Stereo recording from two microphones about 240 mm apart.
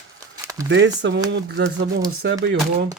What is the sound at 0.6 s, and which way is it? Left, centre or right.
Speech, right.